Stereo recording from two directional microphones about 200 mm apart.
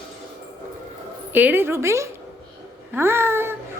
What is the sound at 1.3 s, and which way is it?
A woman's voice, 10° right (ahead or behind).